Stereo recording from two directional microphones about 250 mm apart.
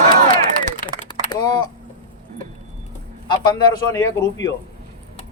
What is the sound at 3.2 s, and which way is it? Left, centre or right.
A man's voice, centre.